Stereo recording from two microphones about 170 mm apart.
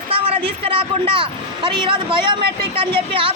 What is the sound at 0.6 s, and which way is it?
A woman's voice, 30° right (ahead or behind).